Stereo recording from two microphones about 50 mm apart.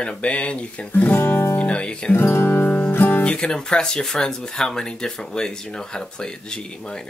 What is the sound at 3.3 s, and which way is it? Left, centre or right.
Speech, centre.